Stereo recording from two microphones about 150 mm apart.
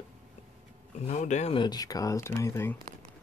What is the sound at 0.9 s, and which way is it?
Speech, 50° left (ahead or behind).